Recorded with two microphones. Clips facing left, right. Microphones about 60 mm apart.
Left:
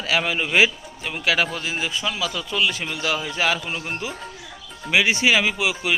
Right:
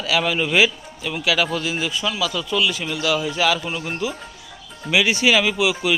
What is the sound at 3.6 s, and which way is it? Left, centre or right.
Speech, centre.